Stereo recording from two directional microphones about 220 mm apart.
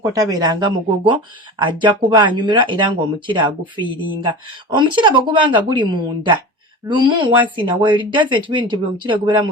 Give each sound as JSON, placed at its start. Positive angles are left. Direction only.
{"t": 0.0, "sound": "speech", "side_deg": -15}